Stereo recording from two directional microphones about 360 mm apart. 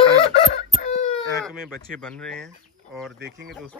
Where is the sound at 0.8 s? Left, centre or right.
Centre.